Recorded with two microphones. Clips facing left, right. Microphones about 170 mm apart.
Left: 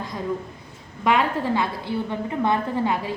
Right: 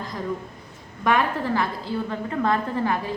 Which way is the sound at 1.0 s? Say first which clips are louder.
Left 1 dB; 20° left (ahead or behind).